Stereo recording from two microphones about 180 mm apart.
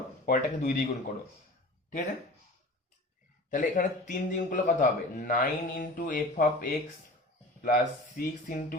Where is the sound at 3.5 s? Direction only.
45° left (ahead or behind).